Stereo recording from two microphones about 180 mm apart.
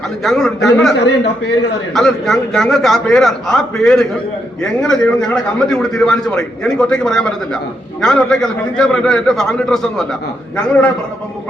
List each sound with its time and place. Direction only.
0.2 s a man's voice: centre (ahead or behind)
0.9 s a man's voice: 75° left (ahead or behind)
1.9 s a man's voice: centre (ahead or behind)